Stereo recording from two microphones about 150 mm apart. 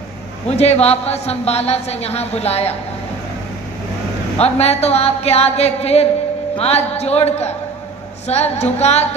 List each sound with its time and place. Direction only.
0.4 s a woman's voice: 45° left (ahead or behind)
4.4 s a woman's voice: 45° left (ahead or behind)